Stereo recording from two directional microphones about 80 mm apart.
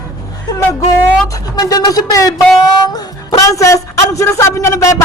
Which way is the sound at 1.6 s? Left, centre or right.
Left.